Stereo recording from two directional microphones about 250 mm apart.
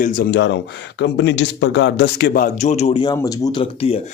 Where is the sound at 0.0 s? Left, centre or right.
Left.